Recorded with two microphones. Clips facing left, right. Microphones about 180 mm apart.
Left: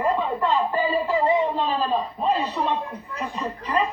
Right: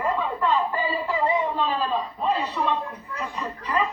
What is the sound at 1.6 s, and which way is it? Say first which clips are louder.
Speech: left 2 dB; 20° left (ahead or behind).